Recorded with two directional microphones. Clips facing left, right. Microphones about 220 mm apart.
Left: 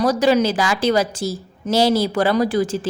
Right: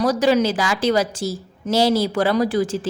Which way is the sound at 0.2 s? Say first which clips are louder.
Left 1 dB; 35° left (ahead or behind).